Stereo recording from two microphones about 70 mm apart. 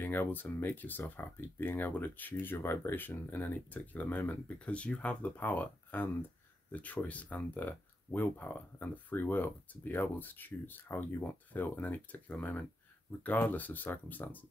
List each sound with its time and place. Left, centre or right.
0.0 s speech: left